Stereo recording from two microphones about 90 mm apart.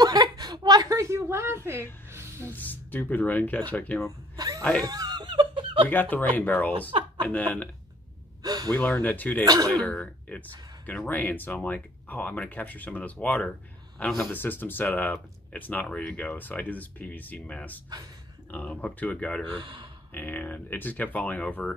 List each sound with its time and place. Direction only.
0.0 s a sound: 45° right (ahead or behind)
0.9 s a woman's voice: 30° right (ahead or behind)
2.5 s speech: 20° left (ahead or behind)
4.4 s a sound: 45° right (ahead or behind); by 5.9 s 65° right (ahead or behind)
5.9 s speech: 20° left (ahead or behind)
6.9 s speech: 80° right
7.2 s speech: 20° left (ahead or behind)
8.4 s gasp: 45° right (ahead or behind)
8.7 s speech: 20° left (ahead or behind)
9.4 s speech: 45° right (ahead or behind)
9.7 s speech: 10° left (ahead or behind)
19.6 s speech: 70° right (ahead or behind)
20.1 s speech: 20° left (ahead or behind)